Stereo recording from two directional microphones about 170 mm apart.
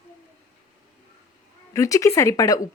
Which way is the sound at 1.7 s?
20° left (ahead or behind).